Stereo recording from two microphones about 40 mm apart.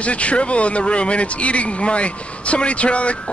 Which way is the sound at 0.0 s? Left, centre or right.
Left.